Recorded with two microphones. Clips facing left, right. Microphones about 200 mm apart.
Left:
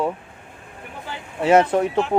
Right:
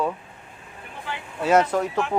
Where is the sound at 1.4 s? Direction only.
30° left (ahead or behind).